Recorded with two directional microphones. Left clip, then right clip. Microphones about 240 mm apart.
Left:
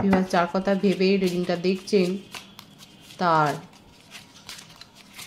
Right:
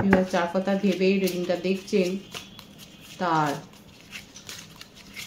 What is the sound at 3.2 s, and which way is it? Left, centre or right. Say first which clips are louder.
Speech: left 4 dB; left.